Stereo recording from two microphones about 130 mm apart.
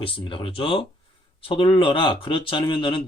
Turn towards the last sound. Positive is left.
turn(degrees=40)  # may be behind; listen again after turning